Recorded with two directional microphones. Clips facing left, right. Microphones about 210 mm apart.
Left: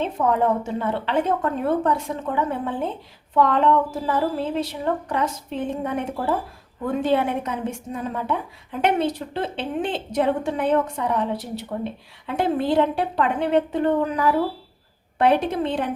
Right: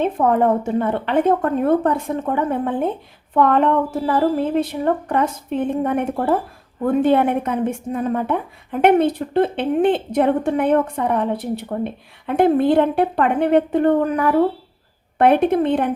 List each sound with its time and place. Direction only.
0.0 s a woman's voice: 55° right (ahead or behind)